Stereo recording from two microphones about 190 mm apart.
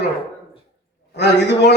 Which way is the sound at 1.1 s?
65° left (ahead or behind).